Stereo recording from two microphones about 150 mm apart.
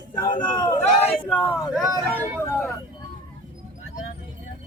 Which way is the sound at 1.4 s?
Centre (ahead or behind).